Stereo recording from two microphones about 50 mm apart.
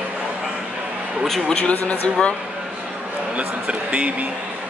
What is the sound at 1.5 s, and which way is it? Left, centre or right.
Speech, left.